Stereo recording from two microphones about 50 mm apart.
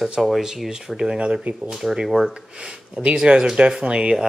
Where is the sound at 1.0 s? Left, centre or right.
Centre.